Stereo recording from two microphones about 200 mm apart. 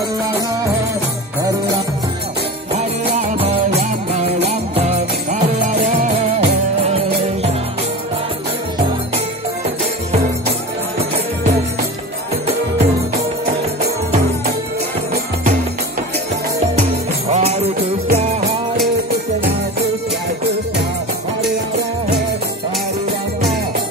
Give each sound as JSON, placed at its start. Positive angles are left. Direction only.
{"t": 3.2, "sound": "music", "side_deg": -30}
{"t": 17.3, "sound": "music", "side_deg": -30}